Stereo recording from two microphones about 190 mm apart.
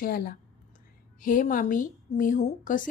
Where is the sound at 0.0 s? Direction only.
50° left (ahead or behind).